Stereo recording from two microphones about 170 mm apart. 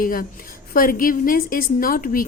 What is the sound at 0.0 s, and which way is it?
A woman's voice, 55° left (ahead or behind).